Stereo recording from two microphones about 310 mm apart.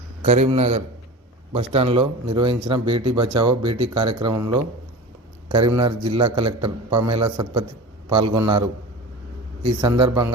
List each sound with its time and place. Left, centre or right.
0.2 s a man's voice: right
5.7 s a man's voice: centre
9.8 s a man's voice: centre